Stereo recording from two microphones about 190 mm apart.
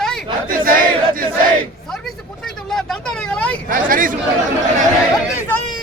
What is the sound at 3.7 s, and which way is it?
Hubbub, 45° right (ahead or behind).